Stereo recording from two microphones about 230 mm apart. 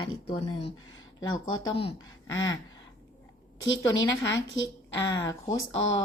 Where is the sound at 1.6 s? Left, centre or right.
Left.